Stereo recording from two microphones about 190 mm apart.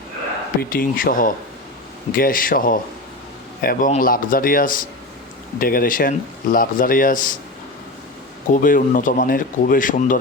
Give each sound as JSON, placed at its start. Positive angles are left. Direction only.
{"t": 0.6, "sound": "speech", "side_deg": 50}
{"t": 8.5, "sound": "speech", "side_deg": 45}